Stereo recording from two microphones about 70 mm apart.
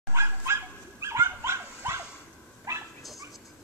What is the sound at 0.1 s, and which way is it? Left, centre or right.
Dog, right.